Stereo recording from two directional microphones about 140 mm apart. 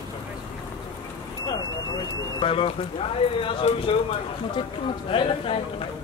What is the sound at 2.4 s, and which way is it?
Speech, 40° left (ahead or behind).